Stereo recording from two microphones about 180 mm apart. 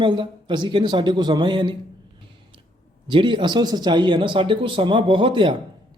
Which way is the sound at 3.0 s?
25° right (ahead or behind).